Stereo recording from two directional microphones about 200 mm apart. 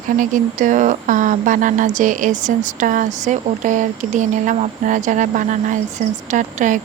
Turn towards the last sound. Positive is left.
turn(degrees=-40)  # may be behind; listen again after turning